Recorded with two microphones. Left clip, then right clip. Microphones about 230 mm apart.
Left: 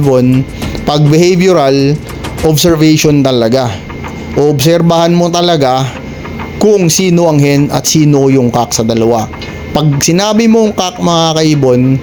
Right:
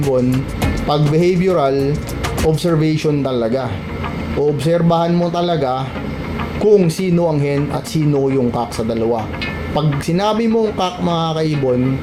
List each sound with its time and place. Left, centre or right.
0.9 s a man's voice: left